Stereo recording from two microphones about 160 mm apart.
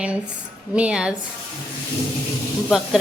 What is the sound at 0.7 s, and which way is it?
Speech, 5° right (ahead or behind).